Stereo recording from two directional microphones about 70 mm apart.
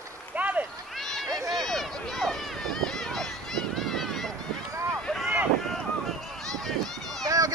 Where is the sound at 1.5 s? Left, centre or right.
Centre.